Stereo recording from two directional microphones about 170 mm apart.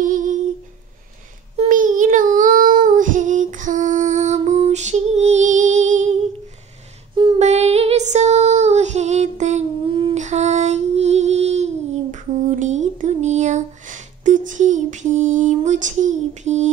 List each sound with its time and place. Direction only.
0.0 s humming: 50° right (ahead or behind)
1.6 s child singing: 50° right (ahead or behind)
7.3 s female singing: 40° right (ahead or behind)
10.1 s a sound: 45° right (ahead or behind)